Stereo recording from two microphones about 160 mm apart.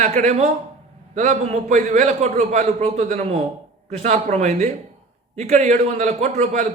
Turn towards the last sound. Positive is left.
turn(degrees=-45)  # may be behind; listen again after turning